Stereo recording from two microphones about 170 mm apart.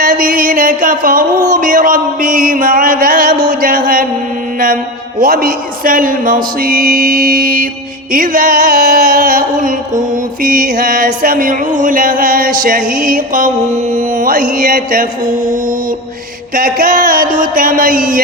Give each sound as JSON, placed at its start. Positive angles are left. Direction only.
{"t": 0.0, "sound": "music", "side_deg": -55}
{"t": 5.2, "sound": "music", "side_deg": -55}
{"t": 16.6, "sound": "music", "side_deg": -55}